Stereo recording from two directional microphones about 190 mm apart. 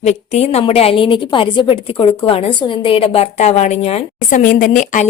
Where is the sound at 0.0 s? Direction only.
35° left (ahead or behind).